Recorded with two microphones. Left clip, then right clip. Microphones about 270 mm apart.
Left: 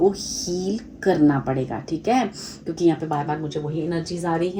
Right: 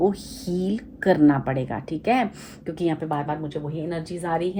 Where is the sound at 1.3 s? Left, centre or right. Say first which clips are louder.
Even; right.